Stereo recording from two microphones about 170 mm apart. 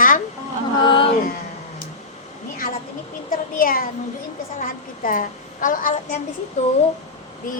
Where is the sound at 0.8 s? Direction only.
30° left (ahead or behind).